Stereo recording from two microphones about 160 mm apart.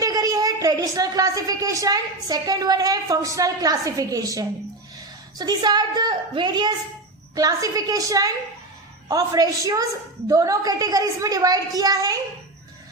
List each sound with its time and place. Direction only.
0.0 s a woman's voice: 25° right (ahead or behind)